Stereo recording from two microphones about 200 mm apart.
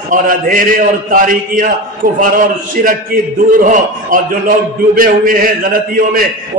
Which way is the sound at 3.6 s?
40° right (ahead or behind).